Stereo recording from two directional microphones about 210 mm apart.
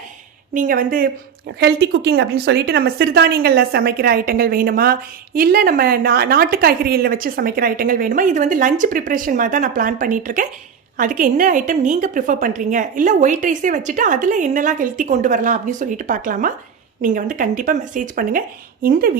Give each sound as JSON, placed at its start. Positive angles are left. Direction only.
{"t": 0.5, "sound": "a woman's voice", "side_deg": -40}
{"t": 1.5, "sound": "a woman's voice", "side_deg": -55}